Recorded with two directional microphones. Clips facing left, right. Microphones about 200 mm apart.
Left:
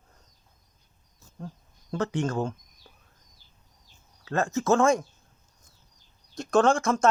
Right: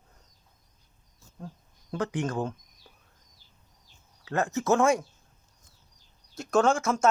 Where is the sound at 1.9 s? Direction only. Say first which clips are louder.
Left 2 dB; 15° right (ahead or behind).